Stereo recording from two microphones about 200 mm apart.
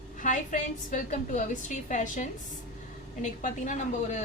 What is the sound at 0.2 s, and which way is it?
A woman's voice, 40° left (ahead or behind).